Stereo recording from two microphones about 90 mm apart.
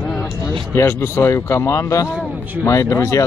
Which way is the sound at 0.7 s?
25° left (ahead or behind).